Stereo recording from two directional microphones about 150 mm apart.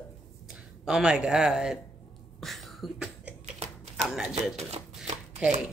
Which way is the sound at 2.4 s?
Centre (ahead or behind).